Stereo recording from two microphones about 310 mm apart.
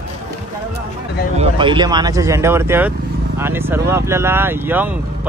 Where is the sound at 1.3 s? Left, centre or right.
Centre.